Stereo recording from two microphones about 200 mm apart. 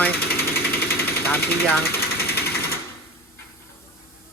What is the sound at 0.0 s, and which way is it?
Engine, 10° left (ahead or behind).